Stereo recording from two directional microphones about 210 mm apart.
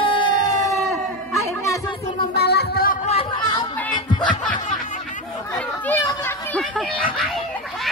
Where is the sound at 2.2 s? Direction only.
50° left (ahead or behind).